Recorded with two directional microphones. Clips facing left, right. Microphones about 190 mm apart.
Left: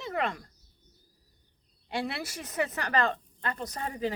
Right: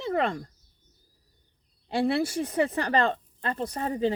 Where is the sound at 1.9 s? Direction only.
30° right (ahead or behind).